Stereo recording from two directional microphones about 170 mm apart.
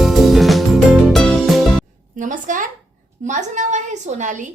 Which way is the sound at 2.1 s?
50° right (ahead or behind).